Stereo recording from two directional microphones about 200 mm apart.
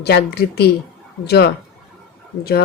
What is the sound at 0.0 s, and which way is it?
Speech, 55° left (ahead or behind).